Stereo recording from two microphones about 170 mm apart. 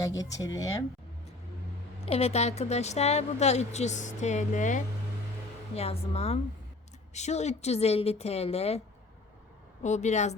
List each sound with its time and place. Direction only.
0.2 s speech: 20° left (ahead or behind)
2.0 s a woman's voice: 35° left (ahead or behind)
9.8 s a woman's voice: 45° left (ahead or behind)